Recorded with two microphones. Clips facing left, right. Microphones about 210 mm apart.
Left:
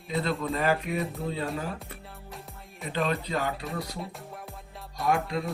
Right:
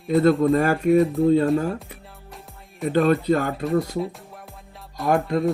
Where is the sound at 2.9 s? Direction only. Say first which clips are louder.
Right 11 dB; 50° right (ahead or behind).